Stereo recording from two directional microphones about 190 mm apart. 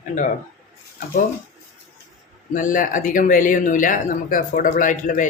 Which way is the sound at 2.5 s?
45° left (ahead or behind).